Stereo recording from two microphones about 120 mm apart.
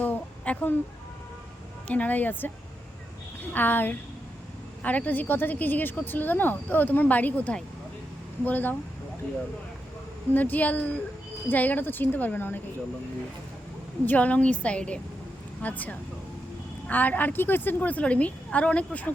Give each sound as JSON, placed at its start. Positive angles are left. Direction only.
{"t": 0.0, "sound": "a sound", "side_deg": 10}
{"t": 1.9, "sound": "a woman's voice", "side_deg": 15}
{"t": 3.5, "sound": "a woman's voice", "side_deg": 15}
{"t": 10.3, "sound": "a woman's voice", "side_deg": 15}
{"t": 14.0, "sound": "a woman's voice", "side_deg": 15}